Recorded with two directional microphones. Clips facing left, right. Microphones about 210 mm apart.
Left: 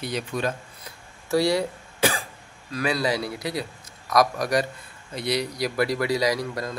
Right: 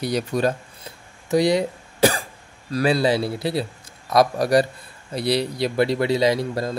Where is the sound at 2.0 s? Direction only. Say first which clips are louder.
Right 6 dB; 40° right (ahead or behind).